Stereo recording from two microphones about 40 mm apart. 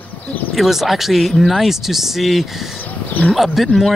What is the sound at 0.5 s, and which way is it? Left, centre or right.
Speech, centre.